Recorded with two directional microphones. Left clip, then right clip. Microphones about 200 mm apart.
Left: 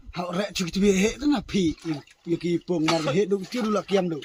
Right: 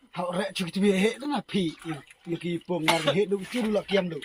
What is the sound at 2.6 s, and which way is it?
Speech, 55° left (ahead or behind).